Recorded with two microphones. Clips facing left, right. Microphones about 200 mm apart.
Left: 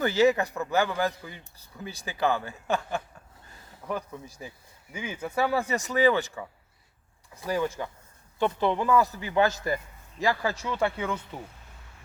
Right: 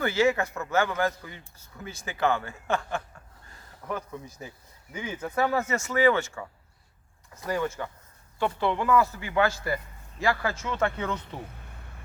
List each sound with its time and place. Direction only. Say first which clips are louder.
0.0 s speech: left 2 dB; 15° left (ahead or behind)
1.8 s speech: left 1 dB; 35° left (ahead or behind)
2.0 s speech: even; 15° left (ahead or behind)
7.4 s a man's voice: left 1 dB; 10° left (ahead or behind)